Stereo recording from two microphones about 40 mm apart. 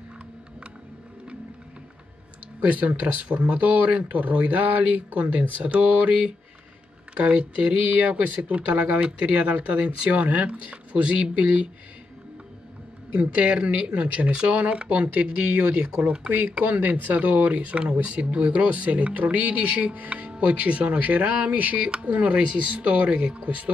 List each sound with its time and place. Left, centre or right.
2.6 s speech: right
7.2 s speech: right
13.1 s speech: right
16.3 s speech: right
16.5 s speech: right